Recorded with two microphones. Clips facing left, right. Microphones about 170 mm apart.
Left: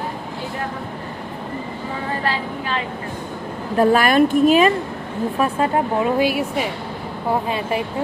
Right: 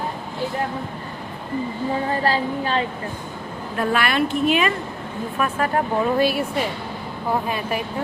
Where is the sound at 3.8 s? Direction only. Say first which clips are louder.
Left 7 dB; 40° left (ahead or behind).